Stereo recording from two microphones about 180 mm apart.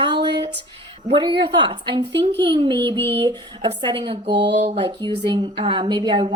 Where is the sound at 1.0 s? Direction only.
25° right (ahead or behind).